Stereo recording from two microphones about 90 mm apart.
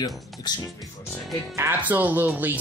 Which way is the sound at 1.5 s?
20° right (ahead or behind).